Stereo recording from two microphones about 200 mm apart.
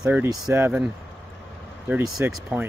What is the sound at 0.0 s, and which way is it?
Speech, 5° right (ahead or behind).